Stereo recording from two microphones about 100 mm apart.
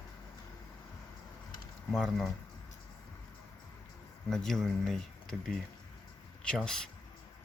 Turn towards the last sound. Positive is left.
turn(degrees=5)  # may be behind; listen again after turning